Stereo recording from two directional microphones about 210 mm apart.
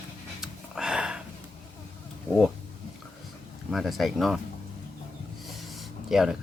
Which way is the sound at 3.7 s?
Centre (ahead or behind).